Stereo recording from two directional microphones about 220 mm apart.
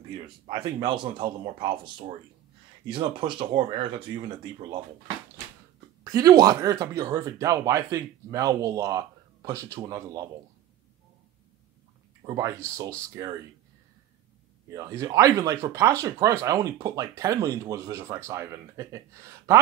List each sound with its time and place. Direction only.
0.5 s speech: 20° right (ahead or behind)
6.1 s speech: 15° right (ahead or behind)
12.3 s speech: 15° right (ahead or behind)
14.7 s speech: 15° right (ahead or behind)